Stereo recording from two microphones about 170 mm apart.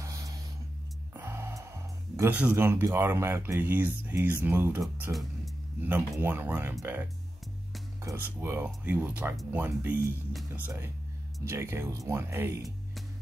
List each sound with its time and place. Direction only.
0.0 s a sound: 20° right (ahead or behind)
1.1 s music: 15° right (ahead or behind)
2.1 s speech: 10° right (ahead or behind)
11.4 s speech: 15° right (ahead or behind)